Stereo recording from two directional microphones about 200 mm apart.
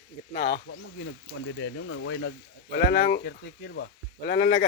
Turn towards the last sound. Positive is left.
turn(degrees=55)  # may be behind; listen again after turning